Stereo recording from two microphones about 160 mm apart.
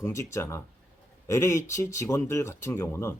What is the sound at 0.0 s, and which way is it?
Speech, 20° left (ahead or behind).